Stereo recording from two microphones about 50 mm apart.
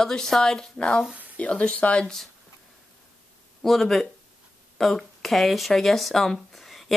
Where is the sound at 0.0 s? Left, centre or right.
Centre.